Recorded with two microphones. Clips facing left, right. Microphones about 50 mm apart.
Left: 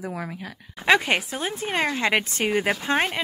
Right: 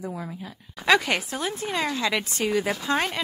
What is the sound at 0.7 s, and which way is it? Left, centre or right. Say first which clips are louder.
Speech: left 1 dB; left.